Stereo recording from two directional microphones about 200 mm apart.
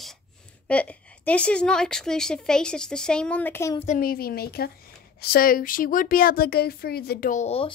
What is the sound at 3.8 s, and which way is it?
A woman's voice, 40° left (ahead or behind).